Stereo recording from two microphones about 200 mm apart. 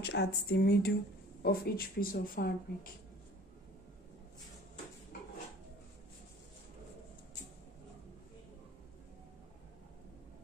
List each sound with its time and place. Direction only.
0.0 s speech: 55° left (ahead or behind)